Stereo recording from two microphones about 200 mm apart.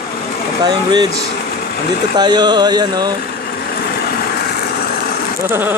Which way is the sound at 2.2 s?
20° right (ahead or behind).